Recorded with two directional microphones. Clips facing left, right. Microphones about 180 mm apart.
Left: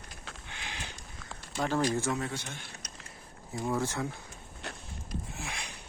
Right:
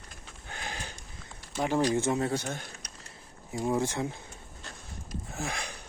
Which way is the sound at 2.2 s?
40° right (ahead or behind).